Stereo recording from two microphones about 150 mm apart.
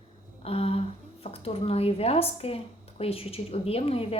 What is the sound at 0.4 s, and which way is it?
A woman's voice, 40° left (ahead or behind).